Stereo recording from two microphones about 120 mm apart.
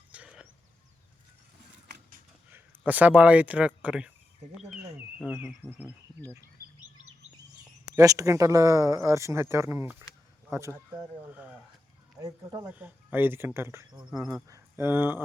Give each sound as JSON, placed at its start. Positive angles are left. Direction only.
{"t": 0.1, "sound": "a sound", "side_deg": -10}
{"t": 2.5, "sound": "speech", "side_deg": -15}
{"t": 4.8, "sound": "insect", "side_deg": -10}
{"t": 7.9, "sound": "speech", "side_deg": -30}
{"t": 12.2, "sound": "speech", "side_deg": -35}
{"t": 12.7, "sound": "speech", "side_deg": -15}